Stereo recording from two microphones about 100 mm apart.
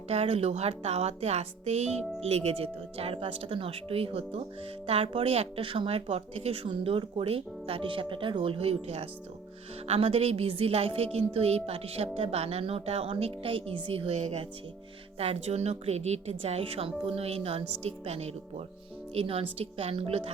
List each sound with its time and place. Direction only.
0.1 s a woman's voice: 90° right
6.8 s a woman's voice: 70° right (ahead or behind)
15.2 s a woman's voice: 85° right
19.1 s a woman's voice: 70° right (ahead or behind); by 20.3 s 85° right